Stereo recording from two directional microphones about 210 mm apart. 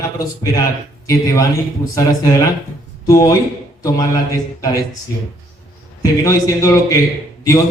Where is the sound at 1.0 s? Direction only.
15° left (ahead or behind).